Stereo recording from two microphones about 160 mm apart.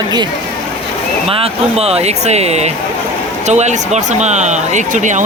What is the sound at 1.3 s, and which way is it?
Speech, 40° right (ahead or behind).